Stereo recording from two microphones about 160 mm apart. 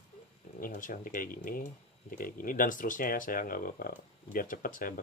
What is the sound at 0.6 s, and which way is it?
Speech, 60° left (ahead or behind).